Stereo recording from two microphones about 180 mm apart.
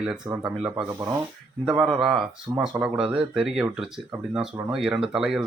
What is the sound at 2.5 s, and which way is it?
Speech, 25° right (ahead or behind).